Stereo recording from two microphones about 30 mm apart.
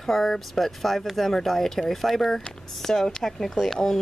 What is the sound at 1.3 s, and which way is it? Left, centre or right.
Speech, centre.